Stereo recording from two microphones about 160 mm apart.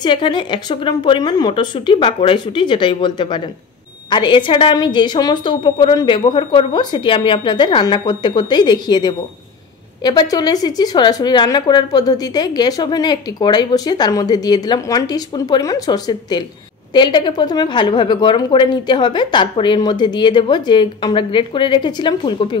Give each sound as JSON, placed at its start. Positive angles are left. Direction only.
{"t": 0.0, "sound": "a woman's voice", "side_deg": 30}